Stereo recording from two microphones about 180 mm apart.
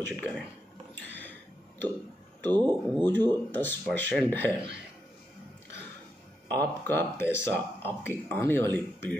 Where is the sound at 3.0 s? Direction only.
10° left (ahead or behind).